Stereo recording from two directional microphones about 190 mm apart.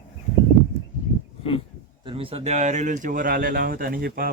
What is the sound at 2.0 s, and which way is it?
Speech, 30° right (ahead or behind).